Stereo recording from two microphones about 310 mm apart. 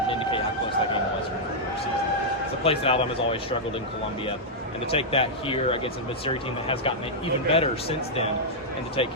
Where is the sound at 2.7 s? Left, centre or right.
Centre.